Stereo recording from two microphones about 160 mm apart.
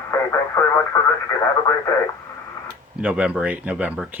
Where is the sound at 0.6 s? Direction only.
15° left (ahead or behind).